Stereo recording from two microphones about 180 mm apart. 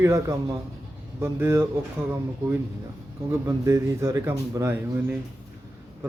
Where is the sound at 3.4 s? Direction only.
15° right (ahead or behind).